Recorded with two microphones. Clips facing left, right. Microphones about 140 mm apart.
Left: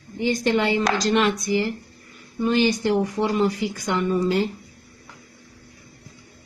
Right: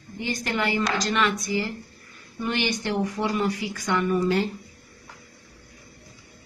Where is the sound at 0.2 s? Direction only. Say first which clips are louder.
Left 6 dB; 25° left (ahead or behind).